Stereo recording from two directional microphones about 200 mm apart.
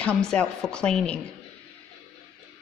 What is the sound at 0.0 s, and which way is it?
A woman's voice, 5° left (ahead or behind).